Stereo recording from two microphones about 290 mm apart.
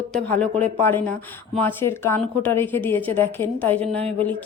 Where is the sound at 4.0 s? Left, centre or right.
Right.